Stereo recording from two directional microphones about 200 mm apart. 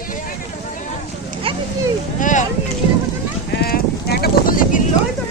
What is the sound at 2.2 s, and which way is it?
Speech, 40° left (ahead or behind).